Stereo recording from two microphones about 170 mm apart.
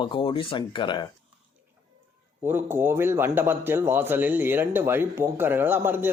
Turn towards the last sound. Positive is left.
turn(degrees=-10)  # may be behind; listen again after turning